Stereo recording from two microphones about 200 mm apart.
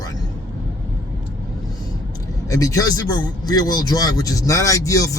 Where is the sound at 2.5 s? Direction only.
15° left (ahead or behind).